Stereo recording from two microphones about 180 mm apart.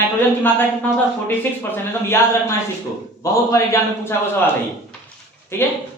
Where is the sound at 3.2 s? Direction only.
15° left (ahead or behind).